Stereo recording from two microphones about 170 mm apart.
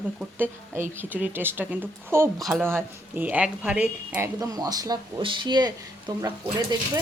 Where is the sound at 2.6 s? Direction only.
15° right (ahead or behind).